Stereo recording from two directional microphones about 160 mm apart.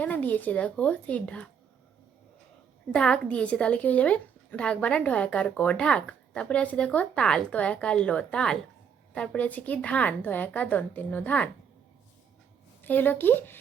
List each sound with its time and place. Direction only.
0.0 s a woman's voice: 10° left (ahead or behind)
2.9 s a woman's voice: 5° left (ahead or behind)
12.8 s a woman's voice: 10° left (ahead or behind)